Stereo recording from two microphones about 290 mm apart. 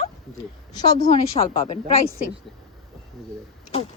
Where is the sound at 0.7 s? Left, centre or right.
Centre.